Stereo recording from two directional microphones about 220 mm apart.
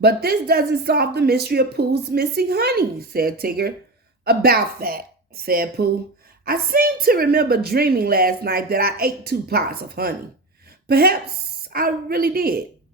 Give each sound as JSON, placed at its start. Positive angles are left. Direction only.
{"t": 0.0, "sound": "speech", "side_deg": -45}